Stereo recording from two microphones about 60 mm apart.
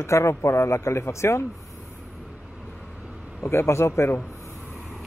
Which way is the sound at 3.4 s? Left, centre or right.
Left.